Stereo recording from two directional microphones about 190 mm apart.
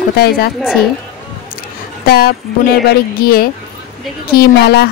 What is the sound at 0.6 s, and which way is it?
Speech, 5° right (ahead or behind).